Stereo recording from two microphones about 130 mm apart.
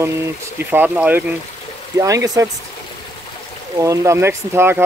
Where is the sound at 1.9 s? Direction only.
25° right (ahead or behind).